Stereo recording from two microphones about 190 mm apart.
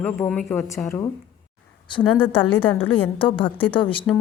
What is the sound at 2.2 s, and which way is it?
A woman's voice, 25° left (ahead or behind).